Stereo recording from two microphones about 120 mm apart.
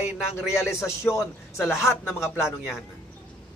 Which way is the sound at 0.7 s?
25° left (ahead or behind).